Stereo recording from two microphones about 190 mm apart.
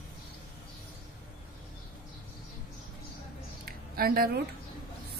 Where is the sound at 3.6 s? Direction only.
50° right (ahead or behind).